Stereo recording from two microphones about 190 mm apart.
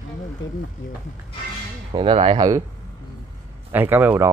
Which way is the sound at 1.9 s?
30° right (ahead or behind).